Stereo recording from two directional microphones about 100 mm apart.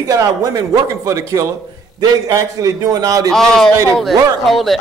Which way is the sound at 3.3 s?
5° left (ahead or behind).